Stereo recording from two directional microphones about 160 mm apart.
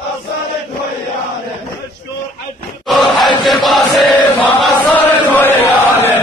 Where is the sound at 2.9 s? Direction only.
Centre (ahead or behind).